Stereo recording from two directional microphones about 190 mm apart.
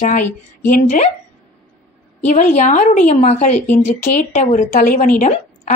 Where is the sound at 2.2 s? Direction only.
35° left (ahead or behind).